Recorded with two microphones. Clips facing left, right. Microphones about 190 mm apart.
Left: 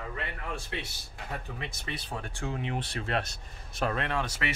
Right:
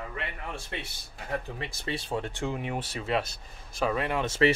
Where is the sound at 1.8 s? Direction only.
25° right (ahead or behind).